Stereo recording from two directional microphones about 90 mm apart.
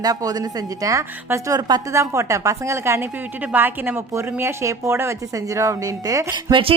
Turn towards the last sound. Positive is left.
turn(degrees=-75)  # may be behind; listen again after turning